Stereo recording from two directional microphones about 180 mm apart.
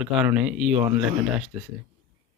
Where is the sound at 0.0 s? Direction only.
5° right (ahead or behind).